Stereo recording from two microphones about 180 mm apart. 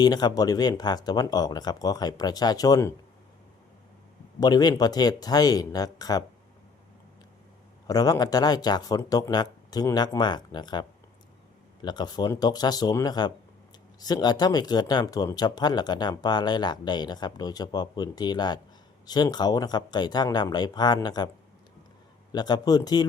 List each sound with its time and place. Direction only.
0.0 s speech: 20° left (ahead or behind)
4.4 s speech: 20° left (ahead or behind)
7.9 s speech: 20° left (ahead or behind)
22.3 s speech: 25° left (ahead or behind)